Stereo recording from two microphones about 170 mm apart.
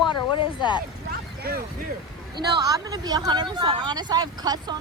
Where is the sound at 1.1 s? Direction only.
65° right (ahead or behind).